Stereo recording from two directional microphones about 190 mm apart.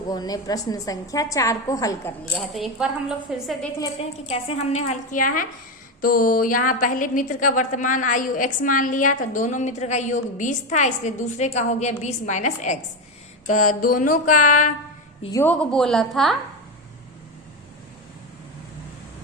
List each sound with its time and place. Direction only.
0.1 s a woman's voice: 20° left (ahead or behind)
2.5 s a woman's voice: centre (ahead or behind)
4.3 s a woman's voice: 30° left (ahead or behind)
15.3 s a woman's voice: 10° left (ahead or behind)